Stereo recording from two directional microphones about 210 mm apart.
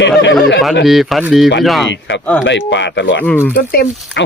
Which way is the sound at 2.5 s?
60° left (ahead or behind).